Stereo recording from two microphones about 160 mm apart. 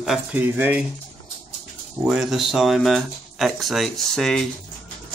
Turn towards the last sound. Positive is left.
turn(degrees=5)  # may be behind; listen again after turning